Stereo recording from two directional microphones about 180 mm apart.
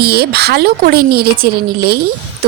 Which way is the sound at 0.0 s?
60° right (ahead or behind).